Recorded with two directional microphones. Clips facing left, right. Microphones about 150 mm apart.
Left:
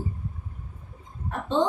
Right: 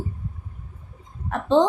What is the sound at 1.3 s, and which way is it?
Speech, 90° right.